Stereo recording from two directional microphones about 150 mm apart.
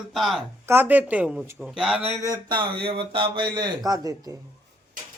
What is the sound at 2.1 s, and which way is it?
Speech, 20° right (ahead or behind).